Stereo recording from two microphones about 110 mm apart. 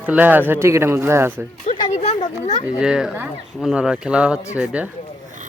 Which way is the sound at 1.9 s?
90° left.